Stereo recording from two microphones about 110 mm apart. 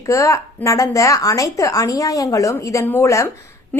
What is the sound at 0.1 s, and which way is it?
A woman's voice, 30° left (ahead or behind).